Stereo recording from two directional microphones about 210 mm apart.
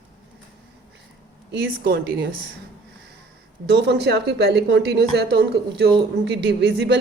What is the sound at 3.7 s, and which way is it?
Speech, 55° right (ahead or behind).